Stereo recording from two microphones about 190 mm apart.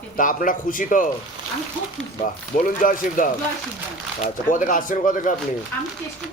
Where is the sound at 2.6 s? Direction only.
45° left (ahead or behind).